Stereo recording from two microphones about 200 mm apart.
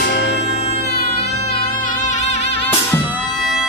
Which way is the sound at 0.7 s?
55° left (ahead or behind).